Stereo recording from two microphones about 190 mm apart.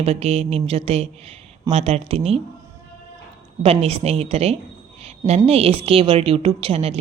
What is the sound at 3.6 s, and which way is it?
Music, 35° right (ahead or behind).